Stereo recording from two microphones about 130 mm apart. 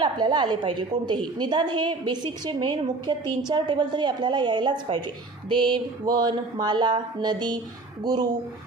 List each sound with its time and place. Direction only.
0.0 s a woman's voice: 35° right (ahead or behind)